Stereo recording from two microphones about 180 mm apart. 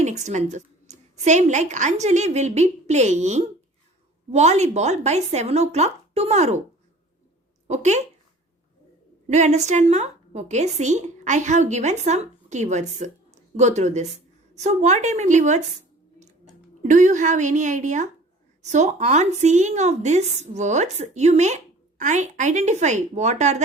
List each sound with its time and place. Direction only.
0.0 s a woman's voice: 40° right (ahead or behind)
7.7 s a woman's voice: 40° right (ahead or behind)
9.3 s a woman's voice: 40° right (ahead or behind)
16.8 s a woman's voice: 45° right (ahead or behind)